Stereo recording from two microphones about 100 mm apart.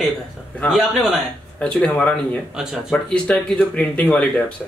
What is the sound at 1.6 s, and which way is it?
Speech, 10° left (ahead or behind).